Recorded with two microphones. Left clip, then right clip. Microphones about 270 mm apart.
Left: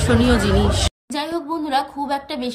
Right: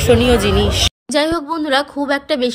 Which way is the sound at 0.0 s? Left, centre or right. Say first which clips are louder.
Right 5 dB; centre.